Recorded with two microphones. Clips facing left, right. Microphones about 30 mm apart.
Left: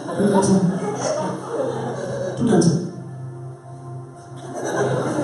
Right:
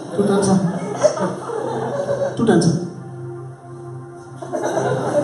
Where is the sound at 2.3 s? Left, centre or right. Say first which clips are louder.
Right 1 dB; right.